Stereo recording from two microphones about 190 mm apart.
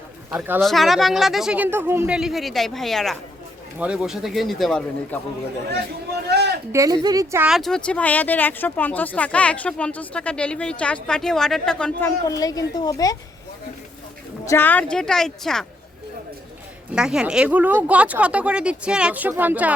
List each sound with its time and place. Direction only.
0.3 s speech: 10° right (ahead or behind)
0.6 s speech: centre (ahead or behind)
6.2 s a sound: 60° right (ahead or behind)
6.7 s speech: 20° right (ahead or behind)
7.4 s speech: centre (ahead or behind); by 13.1 s 20° left (ahead or behind)
14.4 s speech: 10° left (ahead or behind)
16.9 s speech: 5° right (ahead or behind)